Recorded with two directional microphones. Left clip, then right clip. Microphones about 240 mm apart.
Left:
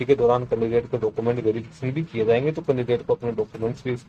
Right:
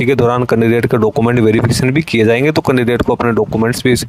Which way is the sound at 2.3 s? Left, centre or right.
Right.